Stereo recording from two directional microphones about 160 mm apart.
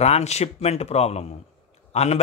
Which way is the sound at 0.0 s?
45° left (ahead or behind).